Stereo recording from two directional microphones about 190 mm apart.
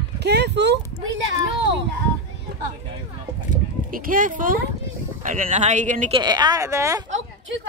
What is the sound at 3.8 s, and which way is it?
Speech, 45° right (ahead or behind).